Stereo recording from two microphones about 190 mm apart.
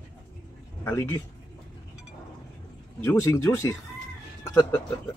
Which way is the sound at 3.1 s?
15° left (ahead or behind).